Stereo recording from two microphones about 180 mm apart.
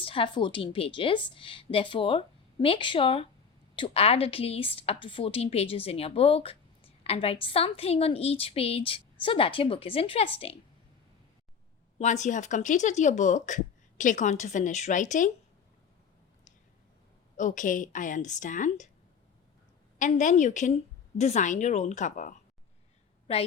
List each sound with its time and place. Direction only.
0.0 s a woman's voice: 30° left (ahead or behind)
11.9 s a woman's voice: 40° left (ahead or behind)
17.3 s a woman's voice: 45° left (ahead or behind)
20.0 s a woman's voice: 45° left (ahead or behind)
23.3 s a woman's voice: 35° left (ahead or behind)